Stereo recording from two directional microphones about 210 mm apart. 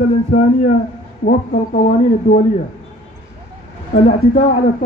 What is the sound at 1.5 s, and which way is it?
Speech, 35° left (ahead or behind).